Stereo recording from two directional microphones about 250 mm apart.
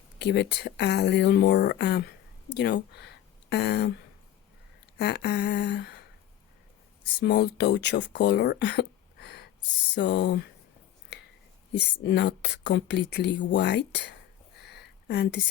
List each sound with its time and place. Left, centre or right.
0.2 s speech: left
4.9 s speech: left
7.2 s speech: left
12.0 s speech: left
14.6 s a sound: left